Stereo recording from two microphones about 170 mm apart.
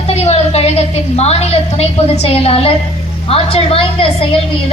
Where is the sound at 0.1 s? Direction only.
35° left (ahead or behind).